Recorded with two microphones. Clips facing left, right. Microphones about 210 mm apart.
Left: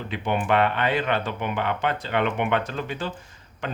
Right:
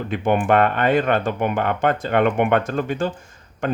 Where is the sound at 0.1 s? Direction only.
50° right (ahead or behind).